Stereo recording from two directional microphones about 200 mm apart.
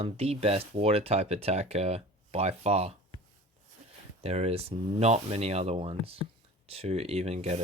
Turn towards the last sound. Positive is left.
turn(degrees=-30)  # may be behind; listen again after turning